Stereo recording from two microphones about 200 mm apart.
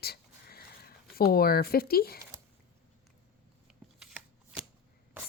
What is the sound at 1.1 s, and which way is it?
Speech, 50° left (ahead or behind).